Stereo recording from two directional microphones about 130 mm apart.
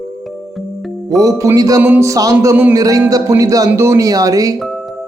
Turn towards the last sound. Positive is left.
turn(degrees=-25)  # may be behind; listen again after turning